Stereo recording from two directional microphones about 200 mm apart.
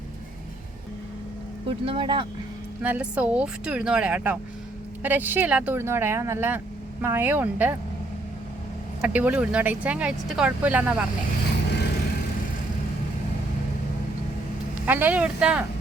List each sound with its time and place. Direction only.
1.6 s speech: 25° right (ahead or behind)
2.8 s speech: 10° right (ahead or behind)
9.0 s speech: 10° right (ahead or behind)
14.8 s speech: 10° right (ahead or behind)